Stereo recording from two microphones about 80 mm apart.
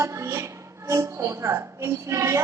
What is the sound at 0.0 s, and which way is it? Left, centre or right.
A woman's voice, right.